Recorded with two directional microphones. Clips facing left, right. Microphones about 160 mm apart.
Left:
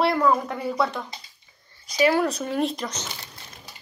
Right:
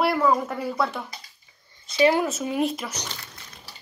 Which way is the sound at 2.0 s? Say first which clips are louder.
Right 1 dB; 20° right (ahead or behind).